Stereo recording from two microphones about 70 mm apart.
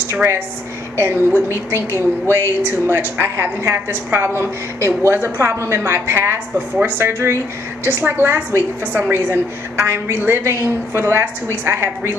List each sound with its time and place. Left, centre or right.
0.1 s a woman's voice: right